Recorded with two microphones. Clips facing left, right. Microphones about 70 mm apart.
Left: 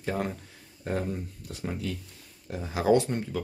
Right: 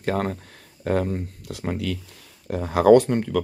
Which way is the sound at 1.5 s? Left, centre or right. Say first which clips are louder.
Right 4 dB; right.